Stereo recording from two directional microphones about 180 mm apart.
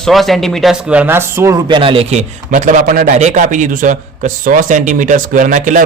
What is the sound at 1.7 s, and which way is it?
A man's voice, 30° right (ahead or behind).